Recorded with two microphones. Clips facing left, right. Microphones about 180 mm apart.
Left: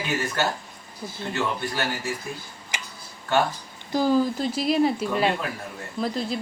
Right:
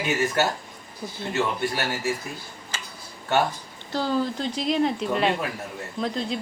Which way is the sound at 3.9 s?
10° left (ahead or behind).